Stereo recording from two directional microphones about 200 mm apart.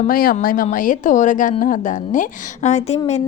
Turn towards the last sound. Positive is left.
turn(degrees=35)  # may be behind; listen again after turning